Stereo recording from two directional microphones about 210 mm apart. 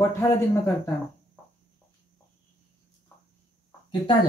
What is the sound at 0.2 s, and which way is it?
Speech, 15° left (ahead or behind).